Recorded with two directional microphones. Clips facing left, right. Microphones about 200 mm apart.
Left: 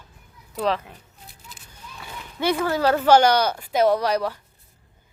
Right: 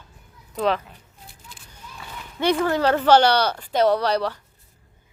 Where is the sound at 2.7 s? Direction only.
10° left (ahead or behind).